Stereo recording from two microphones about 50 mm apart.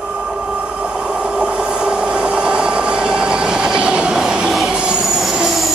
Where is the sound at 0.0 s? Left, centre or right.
Right.